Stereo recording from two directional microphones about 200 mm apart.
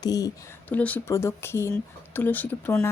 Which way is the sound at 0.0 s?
20° left (ahead or behind).